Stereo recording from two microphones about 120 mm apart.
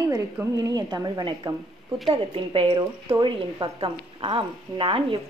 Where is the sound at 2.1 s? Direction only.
50° right (ahead or behind).